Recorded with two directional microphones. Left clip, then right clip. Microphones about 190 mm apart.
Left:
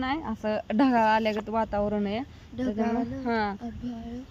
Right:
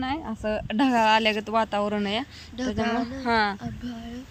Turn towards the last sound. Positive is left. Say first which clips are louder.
# right 3 dB
turn(degrees=5)  # may be behind; listen again after turning